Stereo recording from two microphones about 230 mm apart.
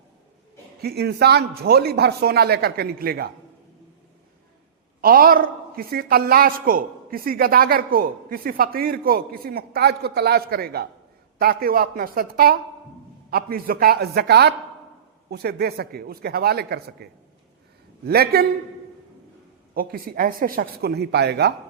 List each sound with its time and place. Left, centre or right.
0.8 s speech: right
4.9 s a man's voice: right
19.7 s a man's voice: right